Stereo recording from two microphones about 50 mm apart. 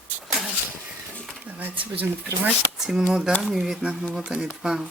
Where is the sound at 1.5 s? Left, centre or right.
Right.